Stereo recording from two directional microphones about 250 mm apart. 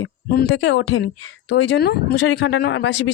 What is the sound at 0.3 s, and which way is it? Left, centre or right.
A woman's voice, left.